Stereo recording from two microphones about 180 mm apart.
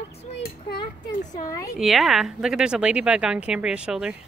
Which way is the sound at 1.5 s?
20° left (ahead or behind).